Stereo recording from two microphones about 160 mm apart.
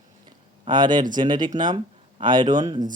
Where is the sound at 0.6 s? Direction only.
30° right (ahead or behind).